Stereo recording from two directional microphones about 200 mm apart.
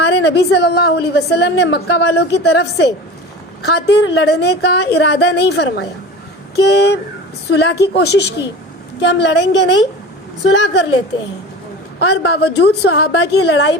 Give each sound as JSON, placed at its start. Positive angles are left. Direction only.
{"t": 0.0, "sound": "a woman's voice", "side_deg": 55}
{"t": 11.9, "sound": "a woman's voice", "side_deg": 60}